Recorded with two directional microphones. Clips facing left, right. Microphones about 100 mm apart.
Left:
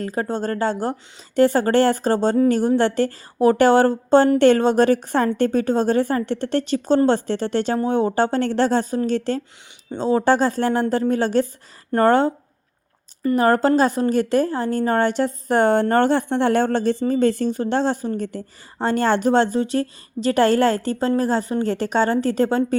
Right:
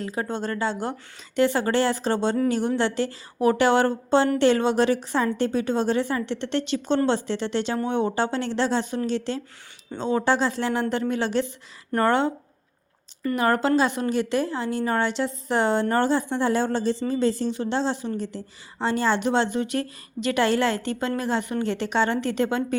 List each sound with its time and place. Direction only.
0.0 s a woman's voice: 45° left (ahead or behind)
10.0 s a woman's voice: 35° left (ahead or behind)
13.3 s a woman's voice: 40° left (ahead or behind)